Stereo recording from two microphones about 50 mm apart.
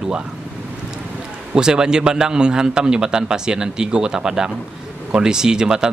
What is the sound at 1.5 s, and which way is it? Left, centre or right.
Speech, centre.